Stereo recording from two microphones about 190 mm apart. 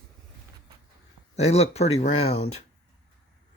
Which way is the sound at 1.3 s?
35° left (ahead or behind).